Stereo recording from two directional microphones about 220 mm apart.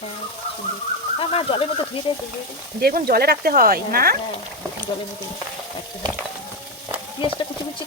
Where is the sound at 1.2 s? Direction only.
25° left (ahead or behind).